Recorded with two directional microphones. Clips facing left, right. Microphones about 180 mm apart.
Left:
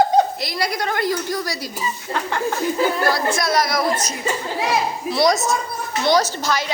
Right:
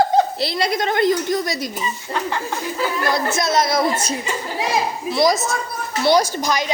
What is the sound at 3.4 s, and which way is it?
Speech, 25° right (ahead or behind).